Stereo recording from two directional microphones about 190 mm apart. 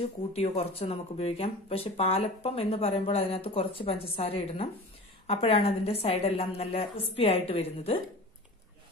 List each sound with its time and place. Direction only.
0.0 s speech: 30° left (ahead or behind)